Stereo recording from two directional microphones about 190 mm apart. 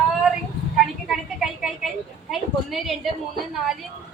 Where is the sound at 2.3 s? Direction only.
Centre (ahead or behind).